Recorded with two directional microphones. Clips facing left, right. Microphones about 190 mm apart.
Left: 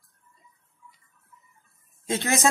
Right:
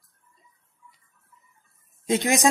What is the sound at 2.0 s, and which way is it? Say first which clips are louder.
Speech: right 3 dB; 15° right (ahead or behind).